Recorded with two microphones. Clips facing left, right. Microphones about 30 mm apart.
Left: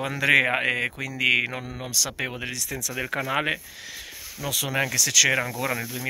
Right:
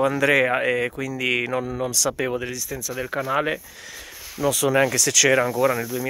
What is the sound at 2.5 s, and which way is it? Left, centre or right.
Speech, left.